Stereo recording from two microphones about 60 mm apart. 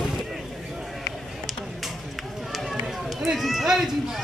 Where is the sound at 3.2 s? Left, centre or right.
Centre.